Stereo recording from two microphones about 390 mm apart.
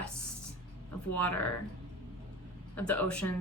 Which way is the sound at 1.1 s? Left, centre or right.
Centre.